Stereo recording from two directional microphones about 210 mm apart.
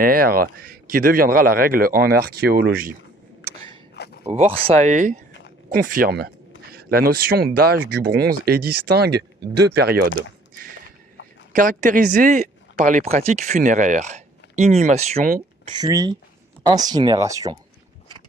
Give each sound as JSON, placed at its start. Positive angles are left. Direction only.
{"t": 0.0, "sound": "speech", "side_deg": -45}
{"t": 4.2, "sound": "speech", "side_deg": -30}
{"t": 11.5, "sound": "speech", "side_deg": -40}
{"t": 15.7, "sound": "speech", "side_deg": -15}